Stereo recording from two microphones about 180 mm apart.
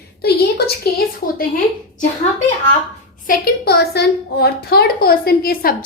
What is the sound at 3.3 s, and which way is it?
A woman's voice, 60° left (ahead or behind).